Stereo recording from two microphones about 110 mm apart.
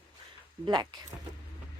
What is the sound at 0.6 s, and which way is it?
Speech, 40° right (ahead or behind).